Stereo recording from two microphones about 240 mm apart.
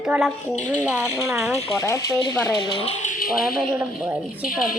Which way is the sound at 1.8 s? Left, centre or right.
Centre.